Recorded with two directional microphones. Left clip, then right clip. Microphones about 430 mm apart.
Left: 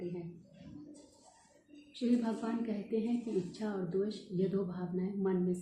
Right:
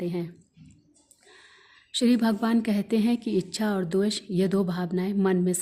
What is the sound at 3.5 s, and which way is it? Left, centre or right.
A woman's voice, right.